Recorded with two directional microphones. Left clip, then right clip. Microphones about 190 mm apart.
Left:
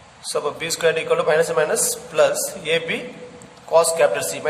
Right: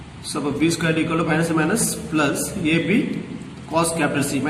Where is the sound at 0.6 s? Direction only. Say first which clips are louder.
Right 1 dB; 55° left (ahead or behind).